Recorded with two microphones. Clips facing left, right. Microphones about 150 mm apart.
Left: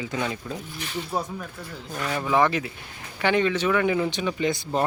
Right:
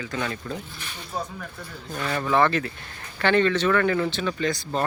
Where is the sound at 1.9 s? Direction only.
10° left (ahead or behind).